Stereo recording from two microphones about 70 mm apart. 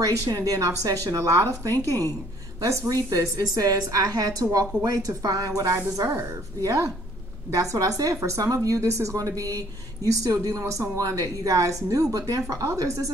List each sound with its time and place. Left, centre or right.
0.0 s speech: right
1.7 s a woman's voice: left
2.9 s a woman's voice: right
5.9 s speech: right
7.5 s speech: right